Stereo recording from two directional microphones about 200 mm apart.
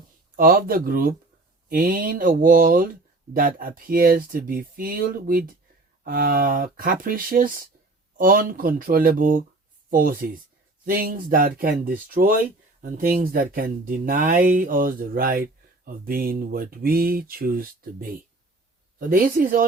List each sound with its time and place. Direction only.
0.3 s speech: 45° right (ahead or behind)
18.9 s speech: 45° right (ahead or behind)